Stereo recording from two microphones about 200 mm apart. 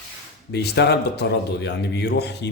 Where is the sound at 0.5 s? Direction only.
55° left (ahead or behind).